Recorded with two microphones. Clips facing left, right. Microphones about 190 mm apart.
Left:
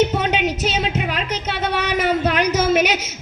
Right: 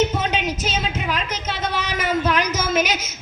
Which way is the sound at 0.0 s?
65° left (ahead or behind).